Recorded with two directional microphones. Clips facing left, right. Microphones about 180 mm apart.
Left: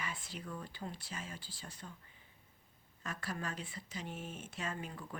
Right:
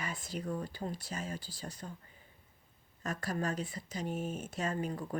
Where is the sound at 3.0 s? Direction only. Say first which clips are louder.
Right 6 dB; 40° right (ahead or behind).